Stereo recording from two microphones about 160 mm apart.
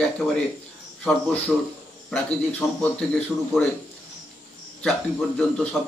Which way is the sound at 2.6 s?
20° left (ahead or behind).